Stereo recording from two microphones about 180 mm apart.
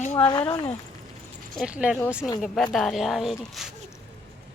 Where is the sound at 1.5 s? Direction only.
5° right (ahead or behind).